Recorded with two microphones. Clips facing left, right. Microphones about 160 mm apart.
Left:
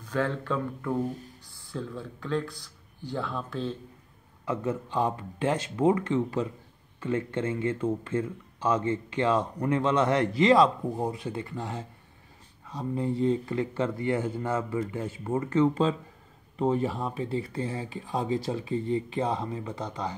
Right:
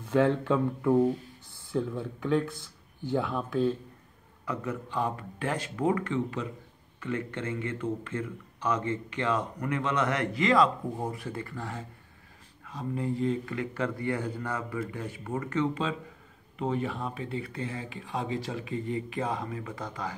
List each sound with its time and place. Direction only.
0.0 s speech: 20° right (ahead or behind)
4.5 s speech: 25° left (ahead or behind)
11.0 s speech: 20° left (ahead or behind)